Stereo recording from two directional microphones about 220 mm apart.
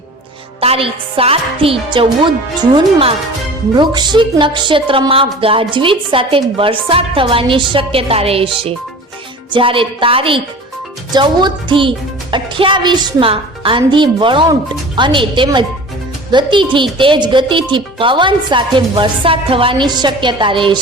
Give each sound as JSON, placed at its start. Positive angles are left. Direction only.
{"t": 0.6, "sound": "a woman's voice", "side_deg": -25}
{"t": 9.5, "sound": "a woman's voice", "side_deg": -25}